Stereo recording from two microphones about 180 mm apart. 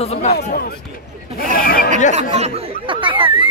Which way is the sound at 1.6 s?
55° left (ahead or behind).